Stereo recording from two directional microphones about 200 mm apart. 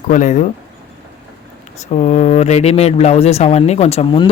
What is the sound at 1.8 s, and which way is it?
Speech, 35° left (ahead or behind).